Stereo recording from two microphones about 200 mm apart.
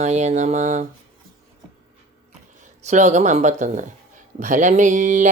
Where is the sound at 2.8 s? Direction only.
35° right (ahead or behind).